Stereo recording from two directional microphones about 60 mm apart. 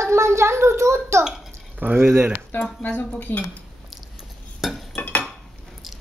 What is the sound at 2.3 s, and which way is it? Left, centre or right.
Speech, left.